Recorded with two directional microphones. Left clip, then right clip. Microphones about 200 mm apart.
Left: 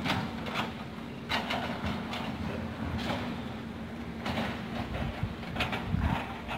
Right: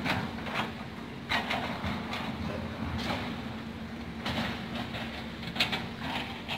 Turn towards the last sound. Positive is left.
turn(degrees=30)  # may be behind; listen again after turning